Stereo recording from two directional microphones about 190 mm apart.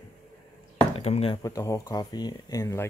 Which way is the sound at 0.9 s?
30° left (ahead or behind).